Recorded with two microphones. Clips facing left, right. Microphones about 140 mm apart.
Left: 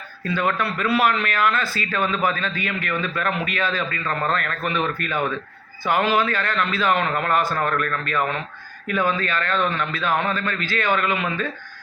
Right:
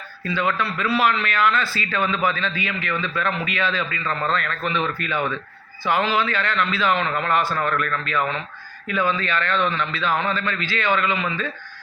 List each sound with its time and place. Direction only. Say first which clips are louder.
0.3 s a man's voice: even; 45° left (ahead or behind)